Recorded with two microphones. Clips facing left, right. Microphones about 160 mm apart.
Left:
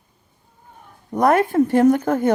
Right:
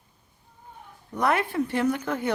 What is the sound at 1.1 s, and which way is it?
A woman's voice, 45° left (ahead or behind).